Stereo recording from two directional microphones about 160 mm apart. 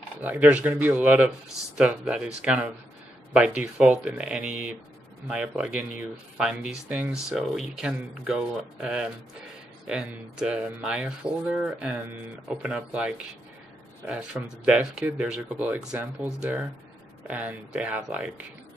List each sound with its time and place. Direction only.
0.2 s speech: 10° right (ahead or behind)
17.3 s speech: 10° right (ahead or behind)